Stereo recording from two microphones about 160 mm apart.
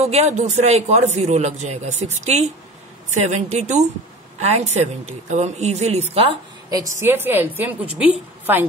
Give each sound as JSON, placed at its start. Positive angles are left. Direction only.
{"t": 0.0, "sound": "a man's voice", "side_deg": -45}
{"t": 7.0, "sound": "a woman's voice", "side_deg": -15}